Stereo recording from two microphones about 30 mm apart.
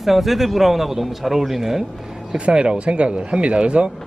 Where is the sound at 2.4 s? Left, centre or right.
Right.